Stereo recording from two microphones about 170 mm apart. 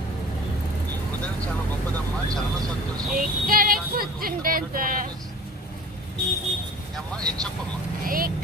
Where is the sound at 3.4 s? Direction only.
60° right (ahead or behind).